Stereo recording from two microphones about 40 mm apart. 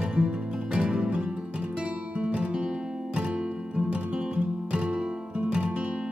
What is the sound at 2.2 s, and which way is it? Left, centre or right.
Music, right.